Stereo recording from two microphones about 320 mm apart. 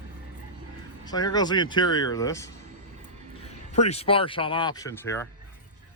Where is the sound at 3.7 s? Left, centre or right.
Left.